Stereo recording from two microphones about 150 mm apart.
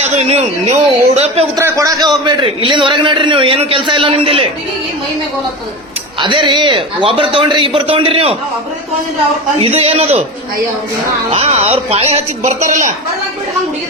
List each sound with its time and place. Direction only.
0.0 s speech: 50° right (ahead or behind)
1.5 s a man's voice: 20° right (ahead or behind); by 4.4 s 35° right (ahead or behind)
6.1 s a man's voice: 30° right (ahead or behind)
9.6 s a man's voice: 40° right (ahead or behind)
11.3 s a woman's voice: 45° right (ahead or behind)